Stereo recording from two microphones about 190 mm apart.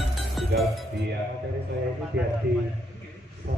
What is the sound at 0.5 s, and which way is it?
Music, 55° right (ahead or behind).